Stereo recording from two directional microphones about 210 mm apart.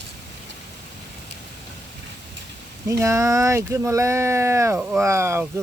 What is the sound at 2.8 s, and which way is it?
Speech, 15° right (ahead or behind).